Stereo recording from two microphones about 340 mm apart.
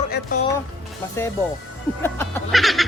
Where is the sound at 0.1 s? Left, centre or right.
Left.